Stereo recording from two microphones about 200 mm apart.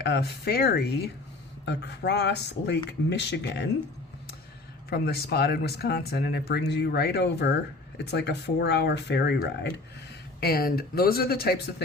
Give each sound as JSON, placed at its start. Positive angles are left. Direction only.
{"t": 0.0, "sound": "speech", "side_deg": 55}
{"t": 4.9, "sound": "speech", "side_deg": 50}